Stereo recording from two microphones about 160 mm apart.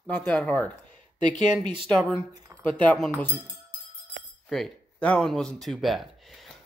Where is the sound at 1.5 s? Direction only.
30° right (ahead or behind).